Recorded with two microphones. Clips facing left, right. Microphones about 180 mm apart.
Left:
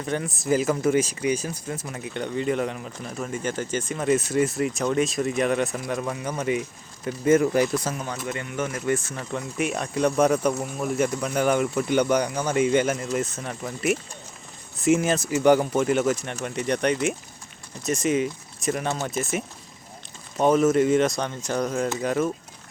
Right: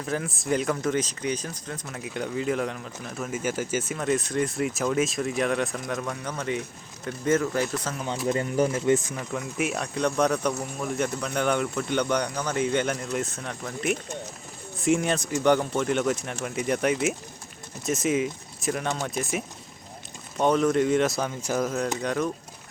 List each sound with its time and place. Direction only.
0.0 s speech: centre (ahead or behind)
3.9 s speech: 5° left (ahead or behind)
8.3 s speech: 35° right (ahead or behind)
8.9 s speech: 15° right (ahead or behind)
9.3 s speech: centre (ahead or behind)